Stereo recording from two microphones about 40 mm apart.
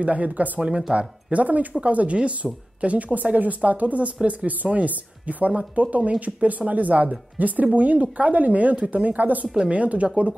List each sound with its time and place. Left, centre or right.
0.0 s speech: right
0.6 s speech: right
0.9 s speech: right